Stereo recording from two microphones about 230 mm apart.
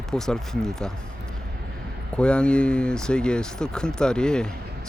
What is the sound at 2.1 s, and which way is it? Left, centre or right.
Speech, centre.